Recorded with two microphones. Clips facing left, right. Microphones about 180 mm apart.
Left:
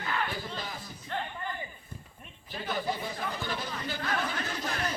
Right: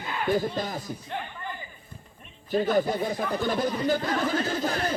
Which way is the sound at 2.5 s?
45° right (ahead or behind).